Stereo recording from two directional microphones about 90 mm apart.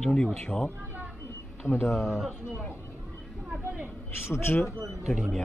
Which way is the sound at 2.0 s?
Centre (ahead or behind).